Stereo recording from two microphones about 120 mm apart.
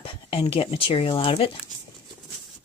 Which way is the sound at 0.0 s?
50° left (ahead or behind).